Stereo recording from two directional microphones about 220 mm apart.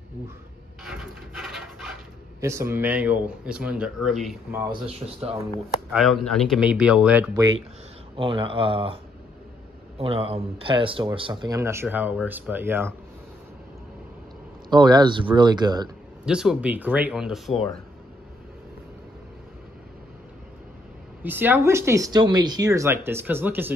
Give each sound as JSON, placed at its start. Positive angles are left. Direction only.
{"t": 0.8, "sound": "dog", "side_deg": 0}
{"t": 2.4, "sound": "speech", "side_deg": -10}
{"t": 4.6, "sound": "speech", "side_deg": -20}
{"t": 5.9, "sound": "speech", "side_deg": 0}
{"t": 8.2, "sound": "speech", "side_deg": -25}
{"t": 14.7, "sound": "speech", "side_deg": -20}
{"t": 16.3, "sound": "speech", "side_deg": -5}
{"t": 21.2, "sound": "speech", "side_deg": -10}